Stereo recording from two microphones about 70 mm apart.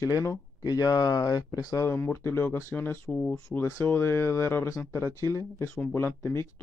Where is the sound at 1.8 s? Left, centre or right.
Left.